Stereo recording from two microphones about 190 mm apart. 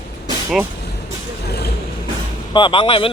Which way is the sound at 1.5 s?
55° left (ahead or behind).